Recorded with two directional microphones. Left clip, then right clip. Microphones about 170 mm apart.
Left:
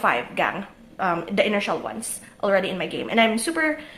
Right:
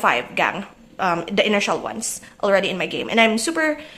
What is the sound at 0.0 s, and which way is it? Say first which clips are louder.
A woman's voice: right 3 dB; 15° right (ahead or behind).